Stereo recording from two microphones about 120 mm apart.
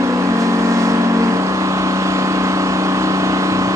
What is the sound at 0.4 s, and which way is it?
Vehicle, 25° right (ahead or behind).